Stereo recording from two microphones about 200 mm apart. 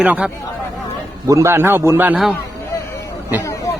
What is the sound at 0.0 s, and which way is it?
Speech, 5° right (ahead or behind).